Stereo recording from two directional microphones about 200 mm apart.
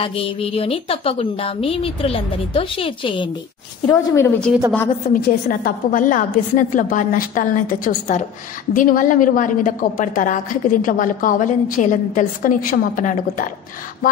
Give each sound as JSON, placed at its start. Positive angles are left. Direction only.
{"t": 0.0, "sound": "a woman's voice", "side_deg": 30}
{"t": 3.8, "sound": "a woman's voice", "side_deg": 15}
{"t": 5.0, "sound": "a woman's voice", "side_deg": 45}